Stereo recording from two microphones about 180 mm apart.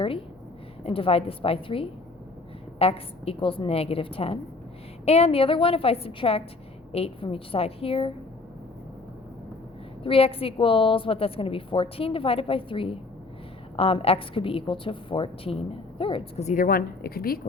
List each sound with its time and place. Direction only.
0.9 s a woman's voice: 30° left (ahead or behind)
10.0 s a woman's voice: 30° left (ahead or behind); by 17.4 s 55° left (ahead or behind)